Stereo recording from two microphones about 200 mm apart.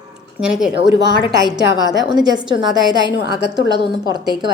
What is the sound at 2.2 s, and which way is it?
Speech, 20° right (ahead or behind).